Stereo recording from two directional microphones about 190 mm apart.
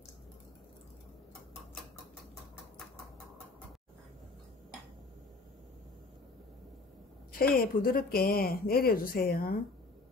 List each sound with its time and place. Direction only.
7.3 s speech: 50° left (ahead or behind)